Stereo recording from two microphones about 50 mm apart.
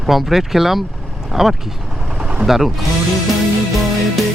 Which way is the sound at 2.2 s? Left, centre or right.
Right.